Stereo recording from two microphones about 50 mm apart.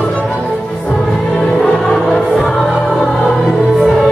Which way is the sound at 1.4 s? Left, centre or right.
Left.